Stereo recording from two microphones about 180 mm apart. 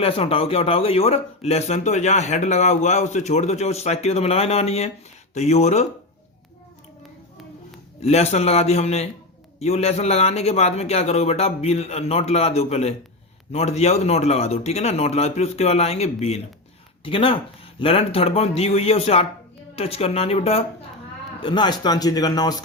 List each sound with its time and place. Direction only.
0.0 s speech: 30° left (ahead or behind)
8.0 s speech: 35° left (ahead or behind)